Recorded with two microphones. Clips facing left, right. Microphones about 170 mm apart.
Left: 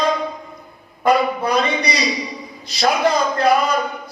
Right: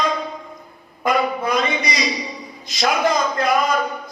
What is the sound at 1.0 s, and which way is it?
Speech, 35° left (ahead or behind).